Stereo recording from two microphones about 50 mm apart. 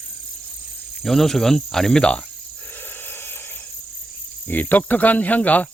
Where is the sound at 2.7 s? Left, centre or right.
Left.